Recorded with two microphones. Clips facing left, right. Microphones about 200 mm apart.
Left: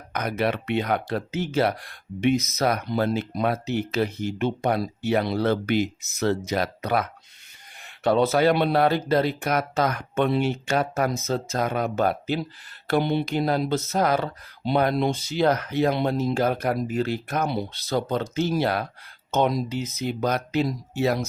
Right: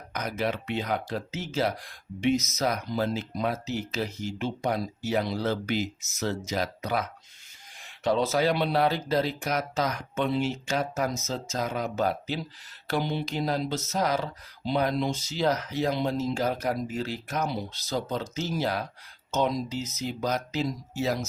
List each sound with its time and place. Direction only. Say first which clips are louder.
0.1 s speech: left 5 dB; 60° left (ahead or behind)